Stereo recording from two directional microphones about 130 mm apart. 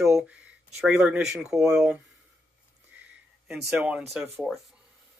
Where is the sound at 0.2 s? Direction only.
10° right (ahead or behind).